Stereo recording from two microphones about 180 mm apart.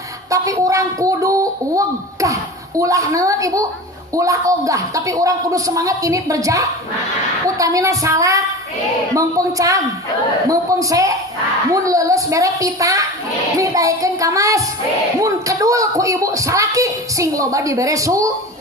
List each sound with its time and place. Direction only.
0.3 s a woman's voice: 20° right (ahead or behind)